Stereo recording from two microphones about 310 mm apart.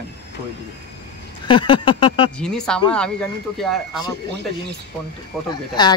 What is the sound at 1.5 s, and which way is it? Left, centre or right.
Speech, centre.